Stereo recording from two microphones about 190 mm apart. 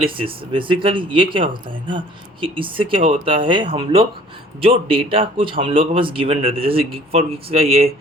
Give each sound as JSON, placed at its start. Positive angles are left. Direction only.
{"t": 0.0, "sound": "speech", "side_deg": -30}